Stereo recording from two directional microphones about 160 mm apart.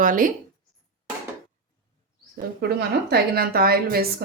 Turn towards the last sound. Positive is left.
turn(degrees=-70)  # may be behind; listen again after turning